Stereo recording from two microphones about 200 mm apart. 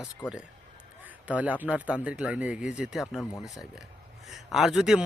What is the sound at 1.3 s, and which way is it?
Speech, 5° right (ahead or behind).